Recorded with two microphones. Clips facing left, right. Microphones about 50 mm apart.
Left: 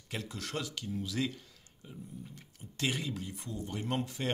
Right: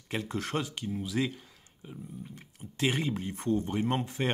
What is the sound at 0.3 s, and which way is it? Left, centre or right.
Speech, right.